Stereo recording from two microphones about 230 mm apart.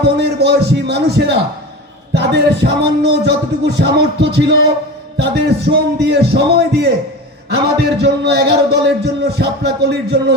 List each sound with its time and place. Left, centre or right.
0.2 s a man's voice: right